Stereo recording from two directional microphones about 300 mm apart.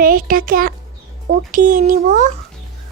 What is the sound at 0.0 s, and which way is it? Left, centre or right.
A woman's voice, right.